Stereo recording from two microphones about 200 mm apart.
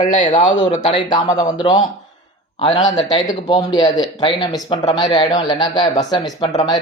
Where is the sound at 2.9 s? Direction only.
20° left (ahead or behind).